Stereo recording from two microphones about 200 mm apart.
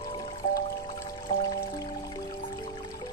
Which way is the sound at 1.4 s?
20° left (ahead or behind).